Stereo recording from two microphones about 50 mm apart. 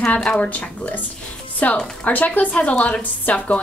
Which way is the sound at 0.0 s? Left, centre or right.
Left.